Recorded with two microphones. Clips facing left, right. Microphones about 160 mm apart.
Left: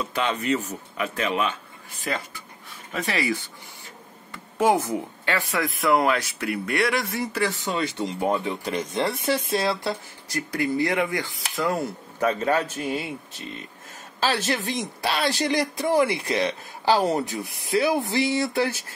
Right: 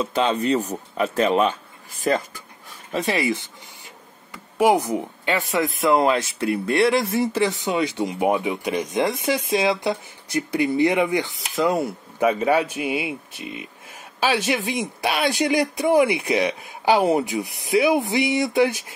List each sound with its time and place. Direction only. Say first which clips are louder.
0.0 s speech: right 5 dB; 25° right (ahead or behind); by 2.4 s 45° right (ahead or behind)
2.9 s speech: right 4 dB; 25° right (ahead or behind)